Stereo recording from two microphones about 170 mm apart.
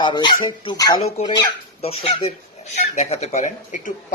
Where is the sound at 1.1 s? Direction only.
40° left (ahead or behind).